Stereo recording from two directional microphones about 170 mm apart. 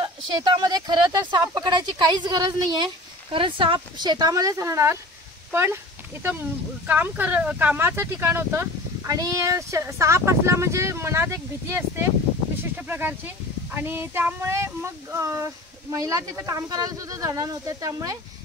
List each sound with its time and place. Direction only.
0.0 s speech: 25° right (ahead or behind)
6.9 s speech: 10° right (ahead or behind)